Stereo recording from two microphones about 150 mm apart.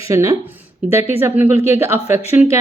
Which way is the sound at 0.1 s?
20° right (ahead or behind).